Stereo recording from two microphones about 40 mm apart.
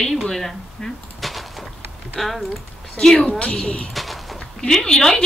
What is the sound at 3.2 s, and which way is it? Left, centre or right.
Speech, left.